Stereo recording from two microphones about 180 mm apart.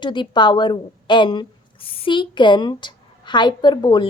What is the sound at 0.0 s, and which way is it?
A woman's voice, 25° left (ahead or behind).